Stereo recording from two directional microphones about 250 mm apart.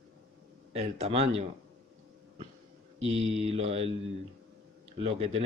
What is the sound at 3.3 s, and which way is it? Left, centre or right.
Speech, right.